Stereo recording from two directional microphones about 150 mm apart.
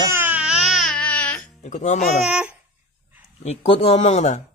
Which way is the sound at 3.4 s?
45° left (ahead or behind).